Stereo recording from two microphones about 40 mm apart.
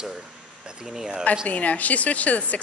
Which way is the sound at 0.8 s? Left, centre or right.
Centre.